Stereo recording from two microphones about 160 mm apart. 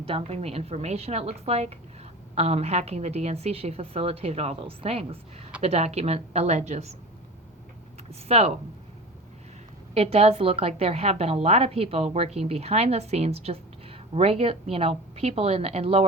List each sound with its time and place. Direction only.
0.0 s a woman's voice: 40° right (ahead or behind)
8.3 s a woman's voice: 40° right (ahead or behind)
9.9 s a woman's voice: 40° right (ahead or behind)